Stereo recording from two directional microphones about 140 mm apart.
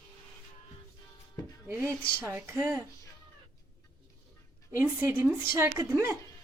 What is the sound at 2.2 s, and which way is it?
Speech, 10° right (ahead or behind).